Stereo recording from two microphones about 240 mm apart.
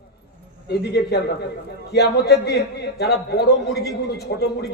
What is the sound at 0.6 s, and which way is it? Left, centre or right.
Speech, left.